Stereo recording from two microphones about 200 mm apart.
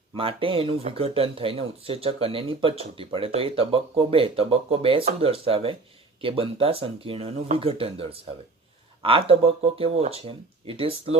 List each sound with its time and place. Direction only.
0.2 s speech: 25° right (ahead or behind)